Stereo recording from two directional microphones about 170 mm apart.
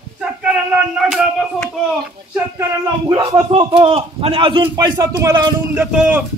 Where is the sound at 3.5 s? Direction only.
35° right (ahead or behind); by 5.8 s 15° right (ahead or behind).